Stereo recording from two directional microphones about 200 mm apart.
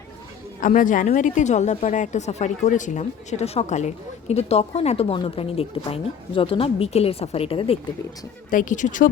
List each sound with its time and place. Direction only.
0.6 s a woman's voice: 40° left (ahead or behind)
8.4 s a woman's voice: 40° left (ahead or behind)